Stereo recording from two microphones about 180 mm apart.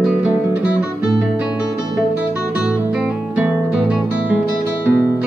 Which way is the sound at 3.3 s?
5° right (ahead or behind).